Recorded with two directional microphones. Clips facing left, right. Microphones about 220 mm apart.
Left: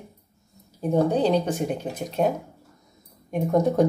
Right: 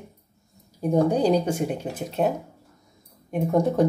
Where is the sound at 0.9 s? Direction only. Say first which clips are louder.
Right 1 dB; 10° right (ahead or behind).